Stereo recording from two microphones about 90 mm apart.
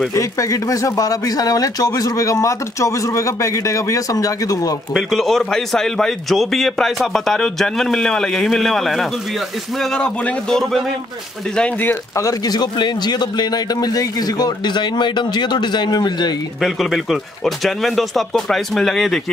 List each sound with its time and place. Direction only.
0.1 s a man's voice: 40° left (ahead or behind)
4.9 s a man's voice: centre (ahead or behind)
12.2 s a man's voice: 45° left (ahead or behind)
16.6 s a man's voice: centre (ahead or behind)